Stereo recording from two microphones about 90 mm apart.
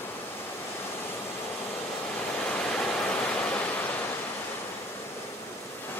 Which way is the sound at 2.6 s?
10° left (ahead or behind).